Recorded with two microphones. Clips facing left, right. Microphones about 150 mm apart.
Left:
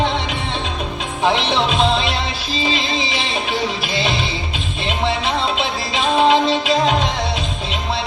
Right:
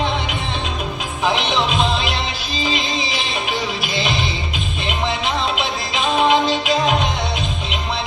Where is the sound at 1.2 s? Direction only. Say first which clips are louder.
Left 2 dB; 30° left (ahead or behind).